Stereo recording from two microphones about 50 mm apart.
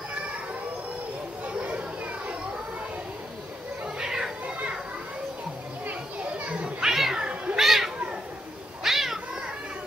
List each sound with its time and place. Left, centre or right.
1.6 s a sound: right
3.8 s cat: centre
6.4 s children playing: centre
6.9 s cat: centre